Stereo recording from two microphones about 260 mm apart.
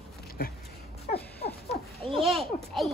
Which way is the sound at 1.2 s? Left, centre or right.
Centre.